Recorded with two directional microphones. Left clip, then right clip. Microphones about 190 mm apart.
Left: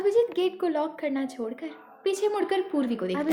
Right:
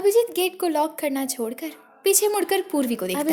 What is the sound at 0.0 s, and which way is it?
A woman's voice, 35° right (ahead or behind).